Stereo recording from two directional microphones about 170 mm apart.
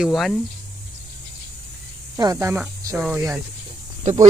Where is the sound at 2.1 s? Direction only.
20° right (ahead or behind).